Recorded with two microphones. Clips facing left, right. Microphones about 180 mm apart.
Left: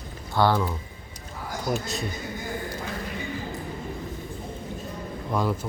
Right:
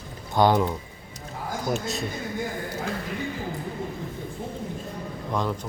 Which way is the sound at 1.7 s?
Centre (ahead or behind).